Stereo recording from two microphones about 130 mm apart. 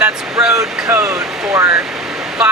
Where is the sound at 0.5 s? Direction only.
25° right (ahead or behind).